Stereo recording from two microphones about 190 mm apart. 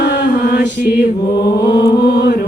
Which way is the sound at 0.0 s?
50° left (ahead or behind).